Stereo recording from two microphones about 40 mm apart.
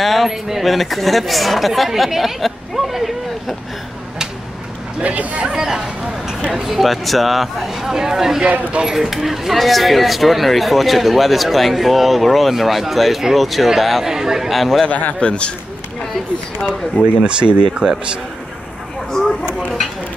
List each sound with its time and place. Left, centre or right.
0.0 s a sound: centre
0.3 s speech: centre
5.0 s speech: right
5.7 s speech: centre
14.0 s speech: centre
14.5 s speech: centre
14.9 s a man's voice: left
15.1 s a man's voice: left
17.2 s speech: right